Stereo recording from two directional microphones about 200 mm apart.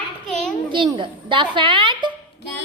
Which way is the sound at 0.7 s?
25° right (ahead or behind).